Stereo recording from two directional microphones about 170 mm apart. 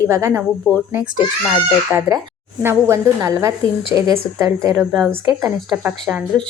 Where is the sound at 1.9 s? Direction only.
20° right (ahead or behind).